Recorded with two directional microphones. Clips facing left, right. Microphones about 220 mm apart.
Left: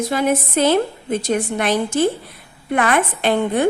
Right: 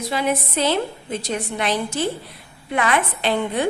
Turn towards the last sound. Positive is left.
turn(degrees=50)  # may be behind; listen again after turning